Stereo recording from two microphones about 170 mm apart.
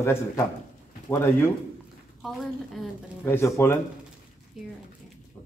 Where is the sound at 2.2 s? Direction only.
Centre (ahead or behind).